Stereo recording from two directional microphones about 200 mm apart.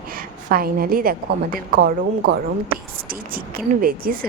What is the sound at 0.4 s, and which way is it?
A woman's voice, 45° right (ahead or behind).